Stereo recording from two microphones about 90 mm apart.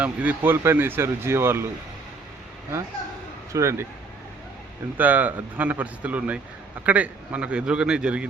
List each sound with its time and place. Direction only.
0.0 s a man's voice: 15° right (ahead or behind)
0.5 s speech: 30° right (ahead or behind)
3.5 s speech: 30° right (ahead or behind)
4.9 s a man's voice: 20° right (ahead or behind)